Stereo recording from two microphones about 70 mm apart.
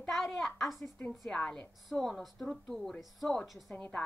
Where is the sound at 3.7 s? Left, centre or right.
Centre.